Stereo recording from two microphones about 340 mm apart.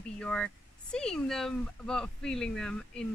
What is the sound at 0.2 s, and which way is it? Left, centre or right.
Speech, centre.